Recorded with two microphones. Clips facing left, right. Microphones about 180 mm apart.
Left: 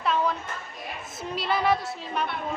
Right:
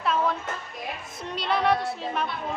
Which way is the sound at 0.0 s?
Centre (ahead or behind).